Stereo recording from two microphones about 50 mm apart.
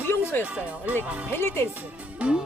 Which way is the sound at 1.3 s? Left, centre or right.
Left.